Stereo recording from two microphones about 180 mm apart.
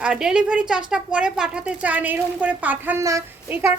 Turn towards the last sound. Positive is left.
turn(degrees=-15)  # may be behind; listen again after turning